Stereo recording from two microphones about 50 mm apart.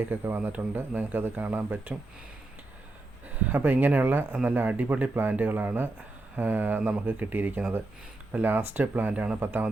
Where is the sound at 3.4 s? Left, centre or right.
Right.